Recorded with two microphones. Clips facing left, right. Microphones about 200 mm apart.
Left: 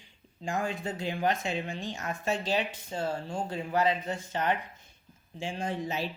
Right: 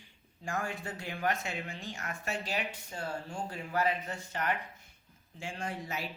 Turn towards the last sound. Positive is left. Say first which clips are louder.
# left 6 dB
turn(degrees=25)  # may be behind; listen again after turning